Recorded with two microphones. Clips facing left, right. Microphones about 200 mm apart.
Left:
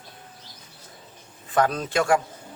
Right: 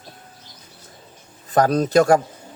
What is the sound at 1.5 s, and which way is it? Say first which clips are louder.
Speech: right 7 dB; 40° right (ahead or behind).